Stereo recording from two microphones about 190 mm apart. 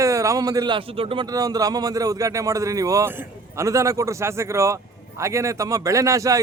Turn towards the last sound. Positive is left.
turn(degrees=-15)  # may be behind; listen again after turning